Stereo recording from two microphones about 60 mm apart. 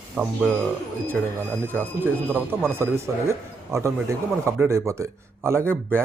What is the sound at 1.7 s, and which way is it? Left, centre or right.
Speech, right.